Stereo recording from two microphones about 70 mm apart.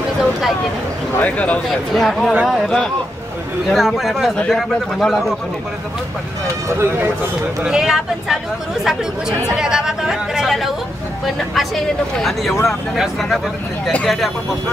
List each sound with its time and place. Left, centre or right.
1.1 s speech: left
2.0 s speech: centre
6.7 s speech: right
7.6 s speech: centre
9.6 s speech: centre